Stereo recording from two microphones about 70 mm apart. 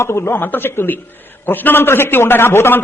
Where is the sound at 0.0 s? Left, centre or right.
Left.